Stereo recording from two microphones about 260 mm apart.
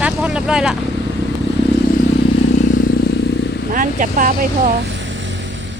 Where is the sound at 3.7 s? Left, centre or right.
Right.